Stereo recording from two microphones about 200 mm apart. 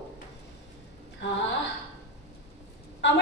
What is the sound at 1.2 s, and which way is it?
Speech, 65° left (ahead or behind).